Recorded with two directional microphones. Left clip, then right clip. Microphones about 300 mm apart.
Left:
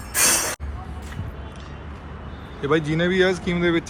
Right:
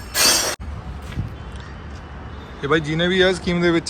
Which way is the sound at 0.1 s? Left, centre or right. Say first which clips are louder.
Right 4 dB; right.